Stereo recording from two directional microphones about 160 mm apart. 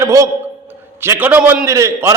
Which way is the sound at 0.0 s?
20° right (ahead or behind).